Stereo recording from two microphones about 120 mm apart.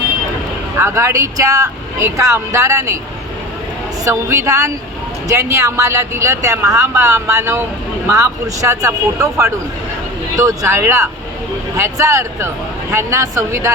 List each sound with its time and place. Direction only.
0.8 s speech: 20° right (ahead or behind)
4.0 s speech: 25° right (ahead or behind)